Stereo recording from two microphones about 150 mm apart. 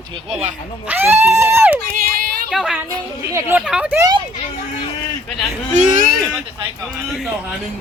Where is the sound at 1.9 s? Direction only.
70° right (ahead or behind).